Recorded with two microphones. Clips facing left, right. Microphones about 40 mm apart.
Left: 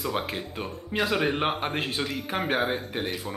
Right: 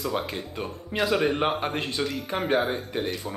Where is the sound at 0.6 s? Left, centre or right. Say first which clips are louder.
Right 1 dB; centre.